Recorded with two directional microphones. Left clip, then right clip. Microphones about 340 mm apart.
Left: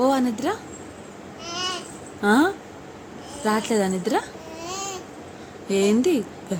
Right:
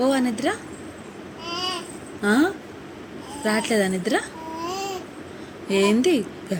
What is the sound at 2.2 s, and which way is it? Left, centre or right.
A woman's voice, centre.